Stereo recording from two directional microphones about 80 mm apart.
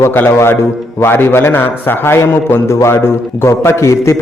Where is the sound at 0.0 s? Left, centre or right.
Left.